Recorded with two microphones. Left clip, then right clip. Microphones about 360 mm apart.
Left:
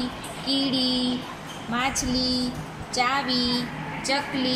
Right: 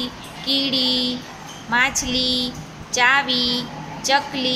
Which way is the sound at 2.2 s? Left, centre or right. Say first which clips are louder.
Right 7 dB; right.